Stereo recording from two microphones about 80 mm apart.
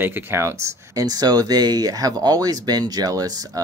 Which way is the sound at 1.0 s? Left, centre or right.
Right.